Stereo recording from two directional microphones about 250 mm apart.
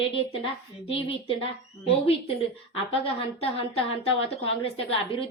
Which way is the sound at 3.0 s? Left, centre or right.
Left.